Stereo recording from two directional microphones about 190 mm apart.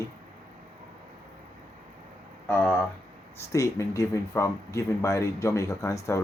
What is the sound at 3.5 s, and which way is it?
Speech, 15° left (ahead or behind).